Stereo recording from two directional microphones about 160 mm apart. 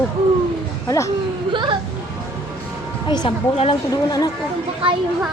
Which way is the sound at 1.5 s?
30° right (ahead or behind).